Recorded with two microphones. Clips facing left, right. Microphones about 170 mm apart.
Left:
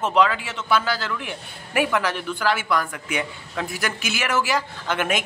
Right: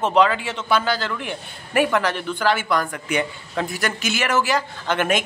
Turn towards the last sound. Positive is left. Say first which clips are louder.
# right 3 dB
turn(degrees=5)  # may be behind; listen again after turning